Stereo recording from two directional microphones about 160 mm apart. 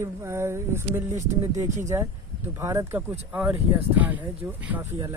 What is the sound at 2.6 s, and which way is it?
Speech, 15° right (ahead or behind).